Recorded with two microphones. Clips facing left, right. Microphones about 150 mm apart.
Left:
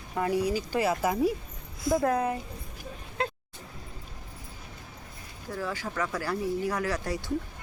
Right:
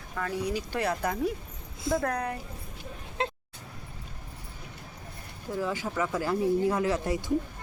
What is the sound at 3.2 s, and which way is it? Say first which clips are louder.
Vehicle: even; 25° right (ahead or behind).